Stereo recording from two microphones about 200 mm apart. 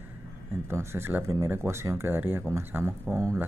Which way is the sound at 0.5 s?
10° right (ahead or behind).